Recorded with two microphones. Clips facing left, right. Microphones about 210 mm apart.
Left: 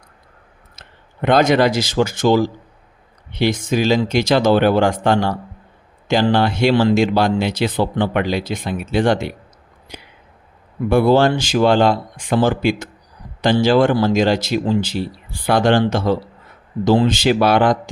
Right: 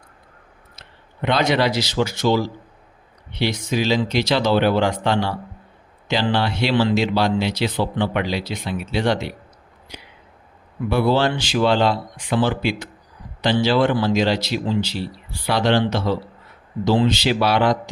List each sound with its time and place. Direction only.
0.8 s speech: 50° left (ahead or behind)